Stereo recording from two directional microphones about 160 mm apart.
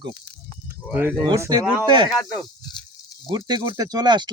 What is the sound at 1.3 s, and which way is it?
Speech, 25° right (ahead or behind).